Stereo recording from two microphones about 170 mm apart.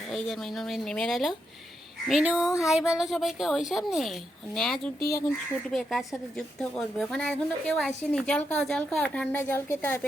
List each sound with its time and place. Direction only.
0.1 s a woman's voice: centre (ahead or behind)
4.9 s speech: 65° left (ahead or behind)
5.7 s a woman's voice: centre (ahead or behind)